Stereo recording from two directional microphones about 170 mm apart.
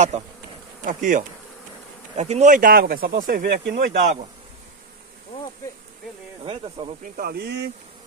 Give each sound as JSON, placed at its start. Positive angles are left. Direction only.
{"t": 0.8, "sound": "bee", "side_deg": -50}
{"t": 2.1, "sound": "speech", "side_deg": -40}
{"t": 6.4, "sound": "speech", "side_deg": -30}
{"t": 7.0, "sound": "speech", "side_deg": -60}